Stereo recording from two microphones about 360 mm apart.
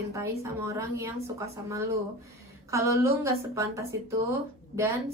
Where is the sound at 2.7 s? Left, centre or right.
Centre.